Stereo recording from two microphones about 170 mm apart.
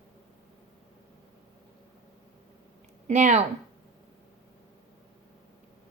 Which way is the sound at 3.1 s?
45° right (ahead or behind).